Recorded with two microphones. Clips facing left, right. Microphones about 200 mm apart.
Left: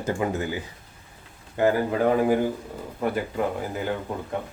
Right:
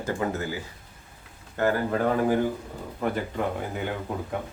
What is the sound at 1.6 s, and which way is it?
Speech, 15° left (ahead or behind).